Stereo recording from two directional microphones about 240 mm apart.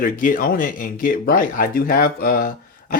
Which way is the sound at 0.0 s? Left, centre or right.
Left.